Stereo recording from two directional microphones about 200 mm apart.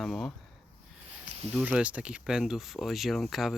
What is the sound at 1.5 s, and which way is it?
Speech, 5° right (ahead or behind).